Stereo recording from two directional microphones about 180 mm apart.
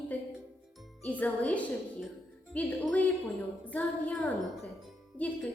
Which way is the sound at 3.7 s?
10° left (ahead or behind).